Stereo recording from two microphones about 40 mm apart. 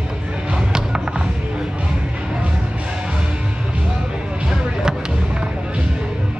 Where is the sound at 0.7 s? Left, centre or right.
Centre.